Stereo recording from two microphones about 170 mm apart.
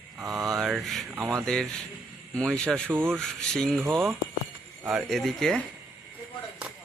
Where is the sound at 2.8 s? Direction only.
10° right (ahead or behind).